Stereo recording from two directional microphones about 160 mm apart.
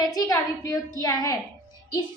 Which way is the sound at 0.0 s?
25° left (ahead or behind).